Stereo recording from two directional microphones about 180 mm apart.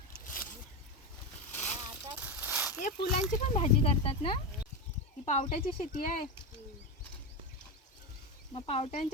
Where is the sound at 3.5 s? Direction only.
35° left (ahead or behind).